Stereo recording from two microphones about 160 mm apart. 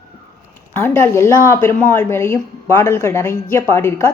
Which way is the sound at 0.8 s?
15° left (ahead or behind).